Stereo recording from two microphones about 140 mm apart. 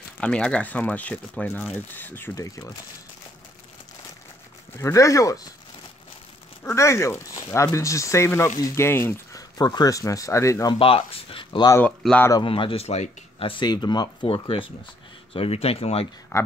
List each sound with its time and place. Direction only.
0.2 s speech: 5° left (ahead or behind); by 2.7 s 25° left (ahead or behind)
4.7 s speech: 20° left (ahead or behind)
6.6 s speech: 20° left (ahead or behind)
9.6 s speech: 30° left (ahead or behind)
10.7 s speech: 40° left (ahead or behind)
12.0 s speech: 10° left (ahead or behind)
12.4 s speech: 40° left (ahead or behind)
16.3 s speech: 20° left (ahead or behind)